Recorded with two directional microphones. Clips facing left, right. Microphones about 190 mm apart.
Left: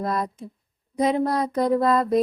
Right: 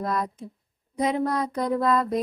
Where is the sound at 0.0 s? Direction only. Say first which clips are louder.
Left 2 dB; 30° left (ahead or behind).